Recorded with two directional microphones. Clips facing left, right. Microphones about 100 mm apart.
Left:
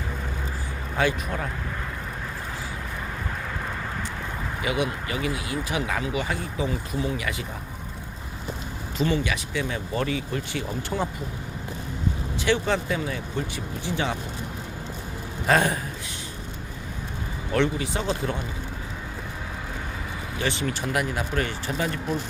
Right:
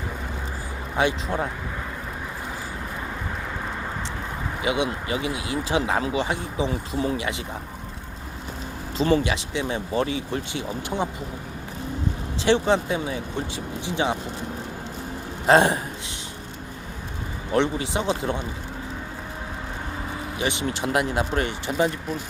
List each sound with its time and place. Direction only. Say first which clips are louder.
0.9 s speech: right 2 dB; 25° right (ahead or behind)
4.6 s speech: right 2 dB; 20° right (ahead or behind)
9.0 s speech: right 4 dB; 30° right (ahead or behind)
12.4 s speech: right 4 dB; 25° right (ahead or behind)
15.4 s speech: right 5 dB; 25° right (ahead or behind)
17.5 s speech: right 2 dB; 20° right (ahead or behind)
20.4 s speech: right 1 dB; 20° right (ahead or behind)